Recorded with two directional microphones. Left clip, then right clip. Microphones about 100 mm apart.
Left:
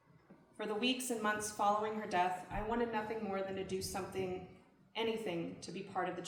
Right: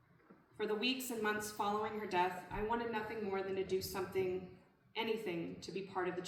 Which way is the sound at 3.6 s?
35° left (ahead or behind).